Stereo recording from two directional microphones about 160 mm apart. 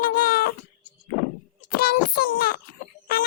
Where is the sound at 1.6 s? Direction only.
65° left (ahead or behind).